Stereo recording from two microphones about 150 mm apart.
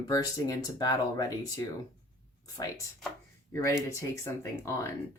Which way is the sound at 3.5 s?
20° left (ahead or behind).